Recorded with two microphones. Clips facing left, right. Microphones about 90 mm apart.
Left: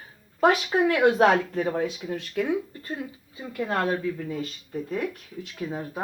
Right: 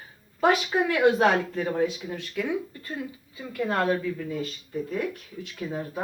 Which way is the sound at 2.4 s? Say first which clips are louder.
Left 3 dB; 45° left (ahead or behind).